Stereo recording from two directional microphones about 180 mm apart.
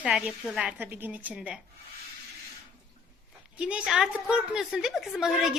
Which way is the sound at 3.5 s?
5° right (ahead or behind).